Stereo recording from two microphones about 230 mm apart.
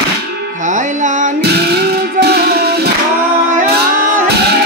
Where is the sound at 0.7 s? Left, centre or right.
Right.